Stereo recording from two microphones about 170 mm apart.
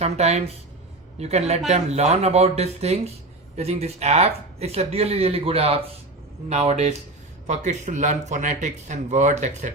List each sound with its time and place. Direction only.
0.0 s speech: 40° right (ahead or behind)